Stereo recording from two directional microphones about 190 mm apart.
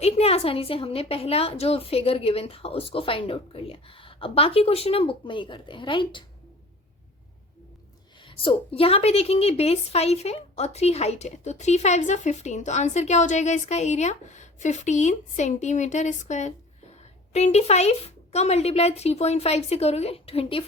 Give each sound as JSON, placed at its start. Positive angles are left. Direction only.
{"t": 0.0, "sound": "a woman's voice", "side_deg": 30}
{"t": 8.2, "sound": "a woman's voice", "side_deg": 25}